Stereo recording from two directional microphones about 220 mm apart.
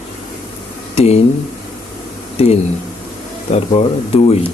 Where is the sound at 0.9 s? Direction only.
30° left (ahead or behind).